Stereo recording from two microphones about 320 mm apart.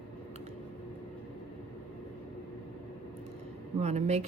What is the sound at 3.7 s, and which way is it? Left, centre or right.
Speech, right.